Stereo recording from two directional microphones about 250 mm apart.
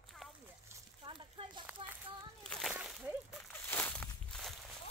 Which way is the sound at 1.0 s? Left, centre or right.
Centre.